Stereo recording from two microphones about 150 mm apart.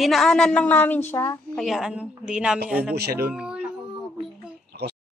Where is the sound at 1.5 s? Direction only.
Centre (ahead or behind).